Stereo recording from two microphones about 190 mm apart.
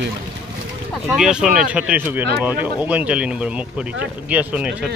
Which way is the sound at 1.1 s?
5° right (ahead or behind).